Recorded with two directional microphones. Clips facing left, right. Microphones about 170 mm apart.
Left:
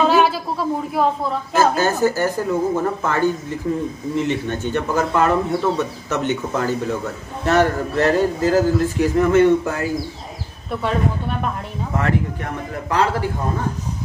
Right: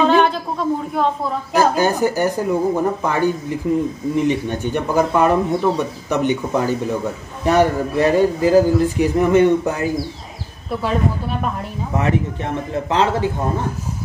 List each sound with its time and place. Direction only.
0.0 s a sound: 5° left (ahead or behind)
1.5 s speech: 15° right (ahead or behind)
12.0 s a man's voice: 20° right (ahead or behind)